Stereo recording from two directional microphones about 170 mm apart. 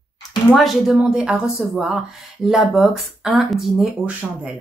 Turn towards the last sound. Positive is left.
turn(degrees=-5)  # may be behind; listen again after turning